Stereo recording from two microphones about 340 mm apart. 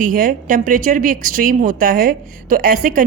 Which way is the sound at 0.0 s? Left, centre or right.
Right.